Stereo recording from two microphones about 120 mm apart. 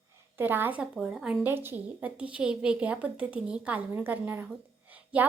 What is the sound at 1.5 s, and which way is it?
A woman's voice, 20° right (ahead or behind).